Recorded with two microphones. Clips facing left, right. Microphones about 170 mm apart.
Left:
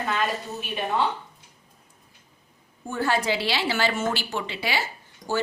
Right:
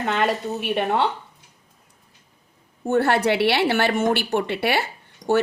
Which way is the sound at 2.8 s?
70° right (ahead or behind).